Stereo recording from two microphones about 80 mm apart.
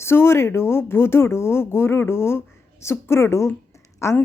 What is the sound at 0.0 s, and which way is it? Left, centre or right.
A woman's voice, left.